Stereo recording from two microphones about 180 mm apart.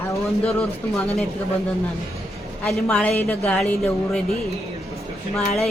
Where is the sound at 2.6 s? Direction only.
5° left (ahead or behind).